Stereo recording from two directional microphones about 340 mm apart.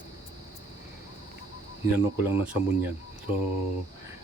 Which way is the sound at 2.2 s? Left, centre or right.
Centre.